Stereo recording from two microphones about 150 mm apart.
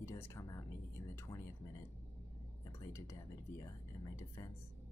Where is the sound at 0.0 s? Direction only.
20° left (ahead or behind).